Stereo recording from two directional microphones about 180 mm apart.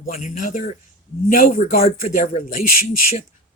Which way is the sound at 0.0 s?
50° left (ahead or behind).